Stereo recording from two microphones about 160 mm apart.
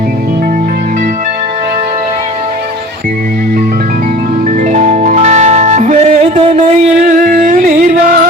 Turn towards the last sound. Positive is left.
turn(degrees=-55)  # may be behind; listen again after turning